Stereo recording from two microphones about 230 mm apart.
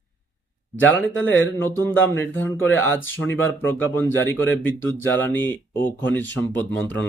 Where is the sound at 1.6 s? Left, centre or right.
Centre.